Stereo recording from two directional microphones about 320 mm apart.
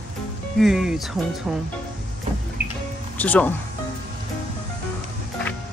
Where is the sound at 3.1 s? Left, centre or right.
Centre.